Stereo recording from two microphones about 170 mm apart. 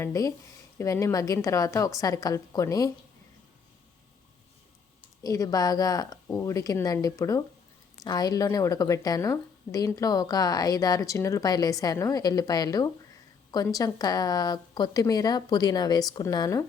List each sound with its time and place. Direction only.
0.0 s a woman's voice: 20° left (ahead or behind)
5.2 s a woman's voice: 20° left (ahead or behind)